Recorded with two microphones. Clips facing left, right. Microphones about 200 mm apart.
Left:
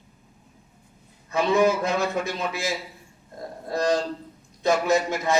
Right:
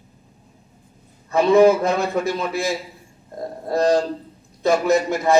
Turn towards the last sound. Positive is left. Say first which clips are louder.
# right 5 dB
turn(degrees=-55)  # may be behind; listen again after turning